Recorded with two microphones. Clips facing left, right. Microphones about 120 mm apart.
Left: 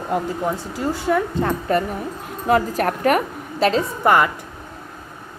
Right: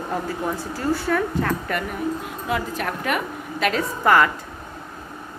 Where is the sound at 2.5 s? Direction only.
45° left (ahead or behind).